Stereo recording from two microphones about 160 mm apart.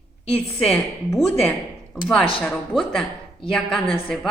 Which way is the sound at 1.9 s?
5° left (ahead or behind).